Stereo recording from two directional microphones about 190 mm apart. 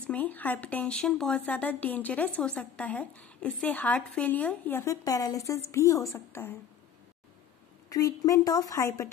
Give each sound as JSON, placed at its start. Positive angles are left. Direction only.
{"t": 0.0, "sound": "speech", "side_deg": 10}
{"t": 7.9, "sound": "speech", "side_deg": 20}